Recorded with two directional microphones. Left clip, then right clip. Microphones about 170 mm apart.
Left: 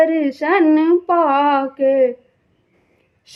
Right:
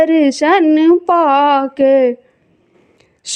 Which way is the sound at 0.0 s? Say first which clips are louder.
Right 4 dB; 40° right (ahead or behind).